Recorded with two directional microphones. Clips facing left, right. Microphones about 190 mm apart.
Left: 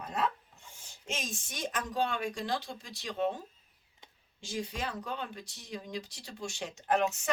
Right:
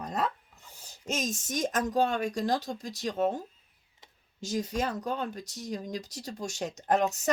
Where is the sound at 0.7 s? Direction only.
40° right (ahead or behind).